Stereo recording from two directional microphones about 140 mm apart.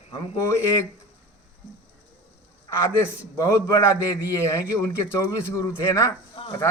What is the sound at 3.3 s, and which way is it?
A man's voice, 25° left (ahead or behind).